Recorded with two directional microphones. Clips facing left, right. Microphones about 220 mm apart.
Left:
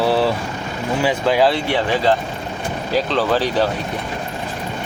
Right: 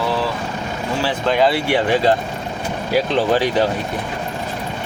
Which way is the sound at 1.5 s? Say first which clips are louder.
Right 2 dB; 10° right (ahead or behind).